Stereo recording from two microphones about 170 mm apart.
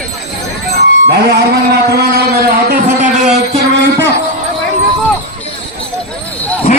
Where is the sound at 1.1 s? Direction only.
80° right; by 3.3 s 50° right (ahead or behind).